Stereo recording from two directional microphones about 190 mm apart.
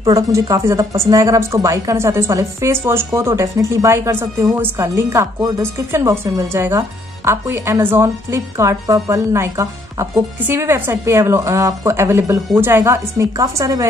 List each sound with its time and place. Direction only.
0.0 s speech: 15° right (ahead or behind)